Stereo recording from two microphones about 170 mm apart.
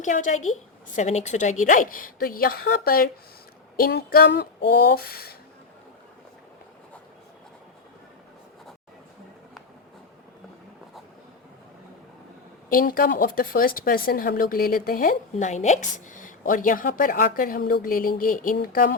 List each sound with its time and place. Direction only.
0.0 s a woman's voice: 45° left (ahead or behind); by 5.4 s 65° left (ahead or behind)
12.6 s speech: 55° left (ahead or behind)